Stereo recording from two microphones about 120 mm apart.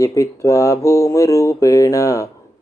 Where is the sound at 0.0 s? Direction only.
25° left (ahead or behind).